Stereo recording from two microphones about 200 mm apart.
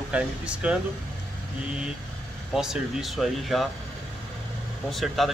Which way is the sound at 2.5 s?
Centre (ahead or behind).